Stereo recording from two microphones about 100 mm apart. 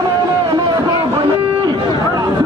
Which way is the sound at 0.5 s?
50° right (ahead or behind).